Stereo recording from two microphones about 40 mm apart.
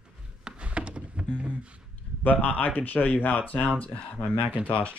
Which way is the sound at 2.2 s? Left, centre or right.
Left.